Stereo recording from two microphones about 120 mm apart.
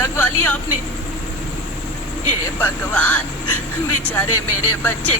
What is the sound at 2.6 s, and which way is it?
Speech, 15° left (ahead or behind).